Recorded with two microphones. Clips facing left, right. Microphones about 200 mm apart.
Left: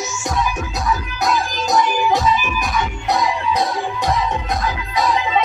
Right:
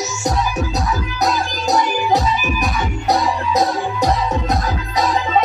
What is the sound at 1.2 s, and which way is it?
Music, 35° right (ahead or behind).